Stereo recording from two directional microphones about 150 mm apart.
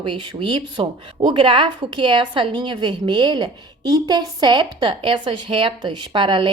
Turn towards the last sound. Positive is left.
turn(degrees=-30)  # may be behind; listen again after turning